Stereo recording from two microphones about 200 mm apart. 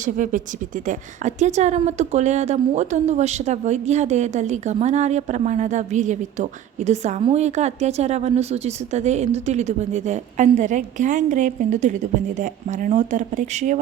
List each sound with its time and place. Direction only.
0.0 s speech: 40° right (ahead or behind)